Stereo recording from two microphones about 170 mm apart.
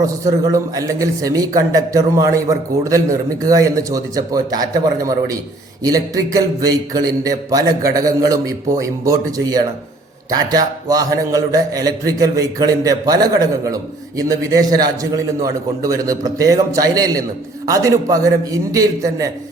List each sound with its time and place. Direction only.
0.0 s a man's voice: 20° right (ahead or behind)